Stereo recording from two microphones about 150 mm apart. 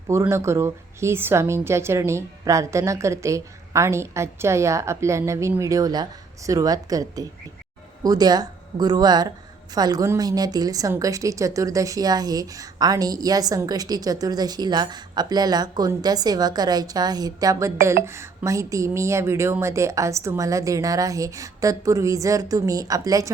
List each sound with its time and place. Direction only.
0.1 s a woman's voice: 20° right (ahead or behind)